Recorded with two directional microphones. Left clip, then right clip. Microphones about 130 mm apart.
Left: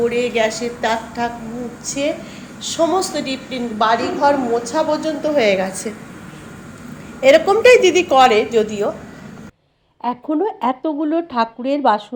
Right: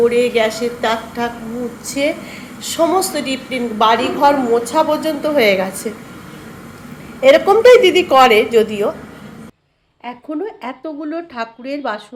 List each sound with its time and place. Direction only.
0.0 s a woman's voice: 10° right (ahead or behind)
1.9 s a woman's voice: 25° right (ahead or behind)
7.2 s a woman's voice: 15° right (ahead or behind)
10.0 s speech: 40° left (ahead or behind)